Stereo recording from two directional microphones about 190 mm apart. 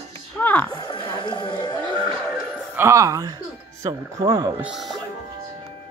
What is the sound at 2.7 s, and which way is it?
Speech, 15° right (ahead or behind).